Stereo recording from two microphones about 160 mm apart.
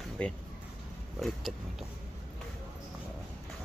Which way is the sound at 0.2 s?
5° left (ahead or behind).